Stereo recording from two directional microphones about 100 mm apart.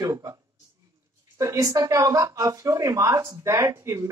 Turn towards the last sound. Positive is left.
turn(degrees=-30)  # may be behind; listen again after turning